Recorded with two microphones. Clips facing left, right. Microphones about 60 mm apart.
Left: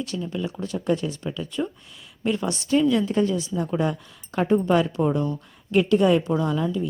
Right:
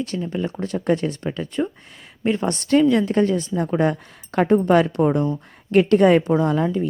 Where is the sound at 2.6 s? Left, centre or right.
Right.